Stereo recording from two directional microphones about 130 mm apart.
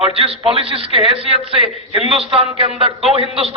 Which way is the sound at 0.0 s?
45° right (ahead or behind).